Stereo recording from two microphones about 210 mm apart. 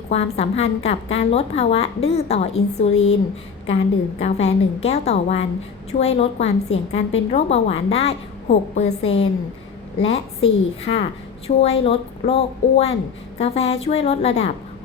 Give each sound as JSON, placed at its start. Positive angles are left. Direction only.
{"t": 0.1, "sound": "a woman's voice", "side_deg": 30}
{"t": 4.2, "sound": "a woman's voice", "side_deg": 30}